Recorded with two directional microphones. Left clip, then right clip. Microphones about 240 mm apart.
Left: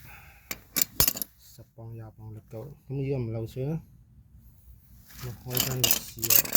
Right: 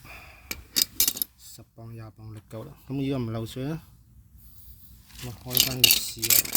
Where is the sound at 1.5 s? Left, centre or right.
Right.